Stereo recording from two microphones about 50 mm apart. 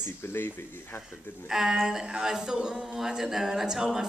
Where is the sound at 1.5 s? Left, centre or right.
Centre.